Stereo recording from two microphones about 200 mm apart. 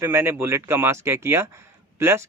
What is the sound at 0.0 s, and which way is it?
Speech, 10° right (ahead or behind).